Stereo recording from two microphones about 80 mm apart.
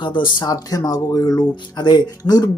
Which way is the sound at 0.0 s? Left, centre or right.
Left.